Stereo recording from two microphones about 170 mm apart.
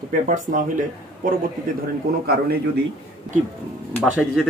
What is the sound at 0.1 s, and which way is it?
Speech, 50° right (ahead or behind).